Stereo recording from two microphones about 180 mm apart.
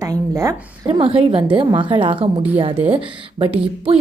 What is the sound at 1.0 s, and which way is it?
A woman's voice, 30° right (ahead or behind).